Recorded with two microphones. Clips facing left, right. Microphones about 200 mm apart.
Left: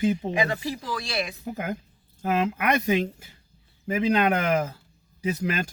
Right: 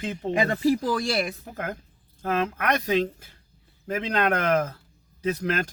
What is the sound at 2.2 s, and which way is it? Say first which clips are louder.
Speech: left 1 dB; 10° left (ahead or behind).